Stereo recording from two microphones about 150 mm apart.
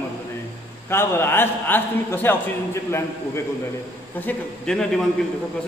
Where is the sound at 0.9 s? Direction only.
15° left (ahead or behind).